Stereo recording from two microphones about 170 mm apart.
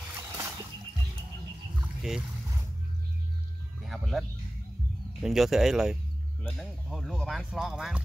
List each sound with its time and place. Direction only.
0.1 s music: 15° right (ahead or behind)
2.0 s boat: 5° right (ahead or behind)
3.8 s music: centre (ahead or behind)
5.2 s speech: centre (ahead or behind)